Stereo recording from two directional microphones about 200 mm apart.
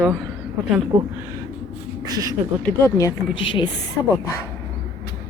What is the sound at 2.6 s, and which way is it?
Speech, 15° left (ahead or behind).